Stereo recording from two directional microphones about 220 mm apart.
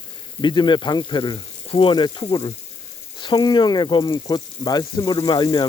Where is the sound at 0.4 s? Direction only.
20° left (ahead or behind).